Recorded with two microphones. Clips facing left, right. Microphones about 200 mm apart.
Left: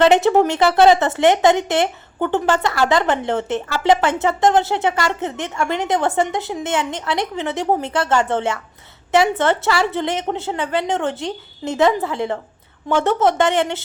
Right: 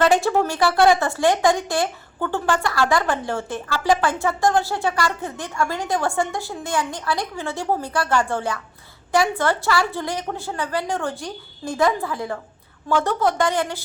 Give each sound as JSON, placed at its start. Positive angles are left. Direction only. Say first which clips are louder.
{"t": 0.0, "sound": "speech", "louder": "left 5 dB", "side_deg": 20}